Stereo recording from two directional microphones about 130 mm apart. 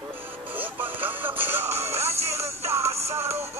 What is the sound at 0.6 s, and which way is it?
Music, 15° right (ahead or behind).